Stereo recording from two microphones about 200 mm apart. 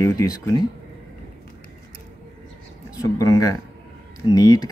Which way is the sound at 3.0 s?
15° left (ahead or behind).